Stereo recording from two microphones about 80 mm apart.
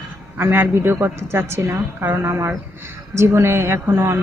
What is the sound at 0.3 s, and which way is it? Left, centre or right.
A woman's voice, right.